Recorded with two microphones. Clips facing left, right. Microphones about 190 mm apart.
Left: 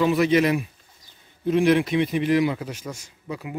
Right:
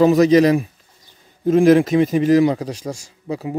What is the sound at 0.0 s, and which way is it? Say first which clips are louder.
A man's voice: right 7 dB; 40° right (ahead or behind).